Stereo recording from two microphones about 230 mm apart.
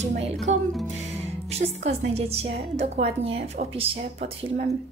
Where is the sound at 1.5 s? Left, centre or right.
Right.